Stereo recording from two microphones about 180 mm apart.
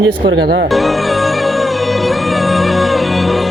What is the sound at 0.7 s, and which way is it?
Music, centre (ahead or behind).